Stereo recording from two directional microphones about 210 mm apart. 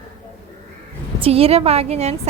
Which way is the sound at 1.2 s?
30° right (ahead or behind).